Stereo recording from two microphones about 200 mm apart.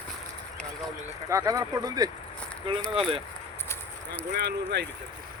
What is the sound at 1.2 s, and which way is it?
Speech, 15° right (ahead or behind).